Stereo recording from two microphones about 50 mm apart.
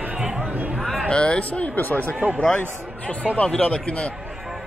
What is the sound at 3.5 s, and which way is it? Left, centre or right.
Speech, left.